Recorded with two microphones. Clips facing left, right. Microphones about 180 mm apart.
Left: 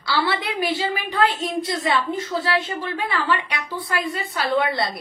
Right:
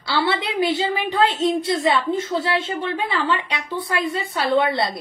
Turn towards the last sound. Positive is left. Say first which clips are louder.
# right 2 dB
turn(degrees=-25)  # may be behind; listen again after turning